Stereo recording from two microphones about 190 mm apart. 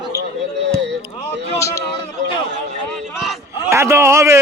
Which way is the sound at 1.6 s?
15° left (ahead or behind).